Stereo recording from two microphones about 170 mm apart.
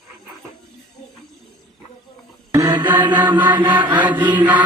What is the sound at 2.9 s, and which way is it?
Mantra, 10° right (ahead or behind).